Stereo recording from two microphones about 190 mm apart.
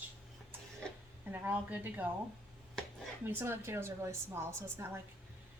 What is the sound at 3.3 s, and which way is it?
Speech, 10° right (ahead or behind).